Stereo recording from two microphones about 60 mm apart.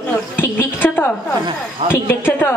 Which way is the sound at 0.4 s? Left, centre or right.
Left.